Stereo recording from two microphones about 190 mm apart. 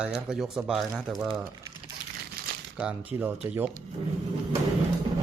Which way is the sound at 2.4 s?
50° right (ahead or behind).